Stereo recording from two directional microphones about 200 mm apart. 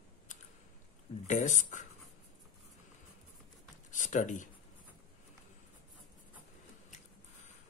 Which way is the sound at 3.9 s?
40° left (ahead or behind).